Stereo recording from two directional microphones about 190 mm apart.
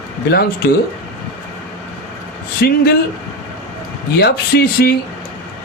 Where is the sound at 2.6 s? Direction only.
60° left (ahead or behind).